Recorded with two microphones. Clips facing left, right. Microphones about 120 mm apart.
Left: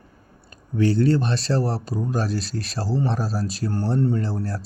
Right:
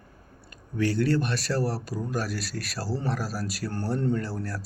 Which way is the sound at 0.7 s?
25° left (ahead or behind).